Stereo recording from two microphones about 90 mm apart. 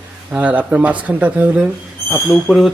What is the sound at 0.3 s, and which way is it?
Speech, 15° right (ahead or behind).